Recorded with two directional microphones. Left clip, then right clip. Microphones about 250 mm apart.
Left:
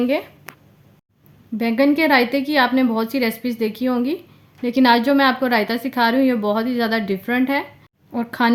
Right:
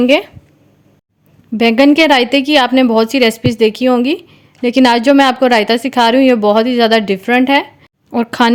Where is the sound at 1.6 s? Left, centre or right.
Right.